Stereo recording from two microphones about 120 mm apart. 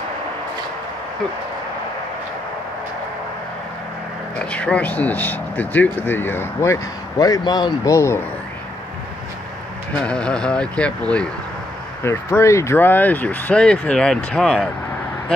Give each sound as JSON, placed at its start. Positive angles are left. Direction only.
{"t": 4.4, "sound": "speech", "side_deg": 10}
{"t": 10.0, "sound": "speech", "side_deg": 10}
{"t": 12.0, "sound": "speech", "side_deg": 20}